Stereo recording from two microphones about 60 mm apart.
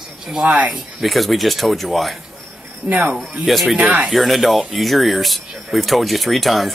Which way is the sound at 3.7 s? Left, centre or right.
Right.